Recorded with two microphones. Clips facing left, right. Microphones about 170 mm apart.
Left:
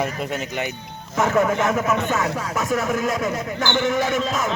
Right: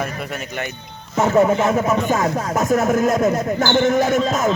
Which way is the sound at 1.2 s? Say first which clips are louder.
Right 4 dB; 25° right (ahead or behind).